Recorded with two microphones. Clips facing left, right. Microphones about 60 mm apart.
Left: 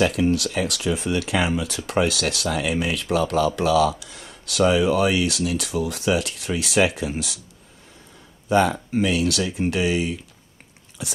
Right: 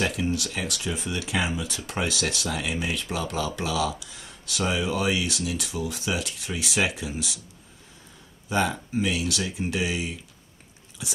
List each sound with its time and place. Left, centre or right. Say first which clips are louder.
0.0 s speech: left 7 dB; left
8.5 s speech: left 7 dB; left